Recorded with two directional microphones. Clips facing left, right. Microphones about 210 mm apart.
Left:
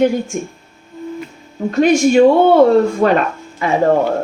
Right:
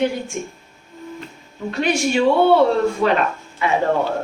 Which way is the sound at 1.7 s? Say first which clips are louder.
Left 8 dB; 45° left (ahead or behind).